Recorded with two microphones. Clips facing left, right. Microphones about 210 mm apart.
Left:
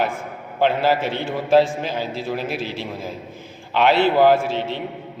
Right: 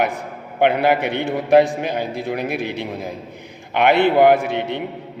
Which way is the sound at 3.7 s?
60° right (ahead or behind).